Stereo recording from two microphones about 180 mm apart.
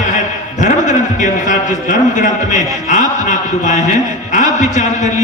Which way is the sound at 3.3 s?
45° left (ahead or behind).